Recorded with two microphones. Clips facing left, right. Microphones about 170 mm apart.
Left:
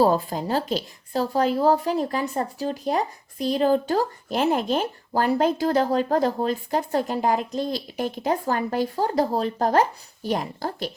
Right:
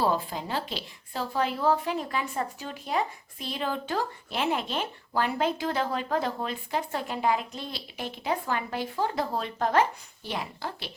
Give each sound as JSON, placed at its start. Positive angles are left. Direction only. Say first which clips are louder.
{"t": 0.0, "sound": "a woman's voice", "louder": "left 7 dB", "side_deg": 40}